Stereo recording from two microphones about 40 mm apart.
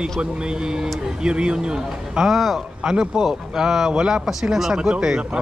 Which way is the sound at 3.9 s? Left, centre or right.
Right.